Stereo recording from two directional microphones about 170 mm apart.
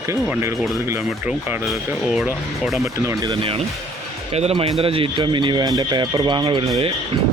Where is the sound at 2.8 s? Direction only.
15° right (ahead or behind).